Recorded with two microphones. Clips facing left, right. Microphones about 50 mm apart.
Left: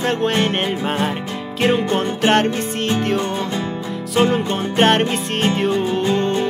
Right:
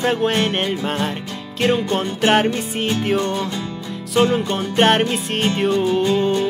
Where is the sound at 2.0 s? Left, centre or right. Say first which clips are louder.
Left 1 dB; centre.